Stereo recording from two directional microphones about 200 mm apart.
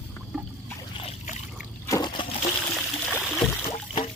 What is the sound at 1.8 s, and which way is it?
Liquid, 20° left (ahead or behind).